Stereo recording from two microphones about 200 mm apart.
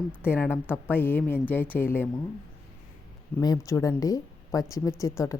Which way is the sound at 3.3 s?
15° left (ahead or behind).